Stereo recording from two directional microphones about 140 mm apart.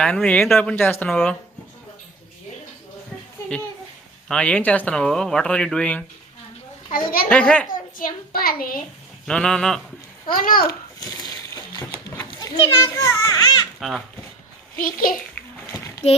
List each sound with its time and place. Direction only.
0.0 s speech: 5° left (ahead or behind)
4.3 s speech: 10° left (ahead or behind)
7.3 s speech: 10° left (ahead or behind)
7.7 s a child's voice: 80° left
9.2 s speech: 5° left (ahead or behind)
10.2 s a child's voice: 90° left
11.0 s a sound: 25° left (ahead or behind)
12.4 s a child's voice: 25° left (ahead or behind)
13.7 s speech: centre (ahead or behind)
14.8 s a child's voice: 90° left
16.0 s child singing: 50° left (ahead or behind)